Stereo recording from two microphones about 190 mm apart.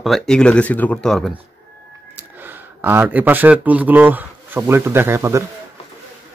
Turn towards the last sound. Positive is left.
turn(degrees=-15)  # may be behind; listen again after turning